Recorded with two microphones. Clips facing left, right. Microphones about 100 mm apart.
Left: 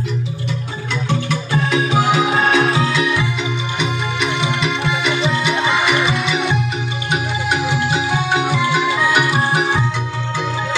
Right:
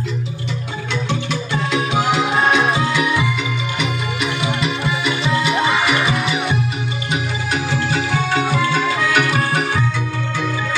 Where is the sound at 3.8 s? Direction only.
25° left (ahead or behind).